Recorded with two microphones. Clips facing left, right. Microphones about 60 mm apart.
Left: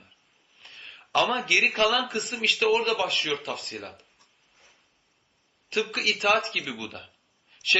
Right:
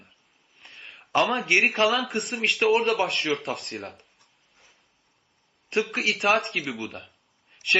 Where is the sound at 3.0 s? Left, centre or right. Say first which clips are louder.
Right 2 dB; right.